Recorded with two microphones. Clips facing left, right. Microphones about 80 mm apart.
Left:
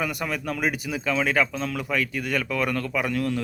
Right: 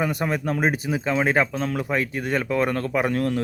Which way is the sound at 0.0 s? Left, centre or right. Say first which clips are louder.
Right 4 dB; right.